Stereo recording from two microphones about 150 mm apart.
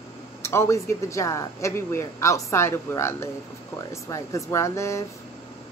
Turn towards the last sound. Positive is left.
turn(degrees=20)  # may be behind; listen again after turning